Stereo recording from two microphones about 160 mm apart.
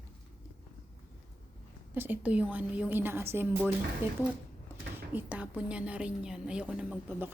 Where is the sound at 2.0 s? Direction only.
10° right (ahead or behind).